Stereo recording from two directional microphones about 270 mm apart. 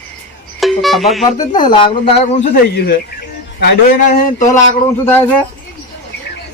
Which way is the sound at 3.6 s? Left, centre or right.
Left.